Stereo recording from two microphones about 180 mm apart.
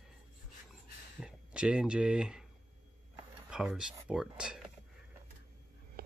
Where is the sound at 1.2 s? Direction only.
5° right (ahead or behind).